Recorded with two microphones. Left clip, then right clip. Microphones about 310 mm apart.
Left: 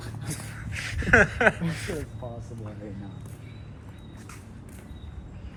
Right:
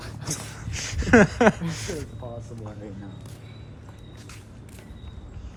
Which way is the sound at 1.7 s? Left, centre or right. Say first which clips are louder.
Right 1 dB; centre.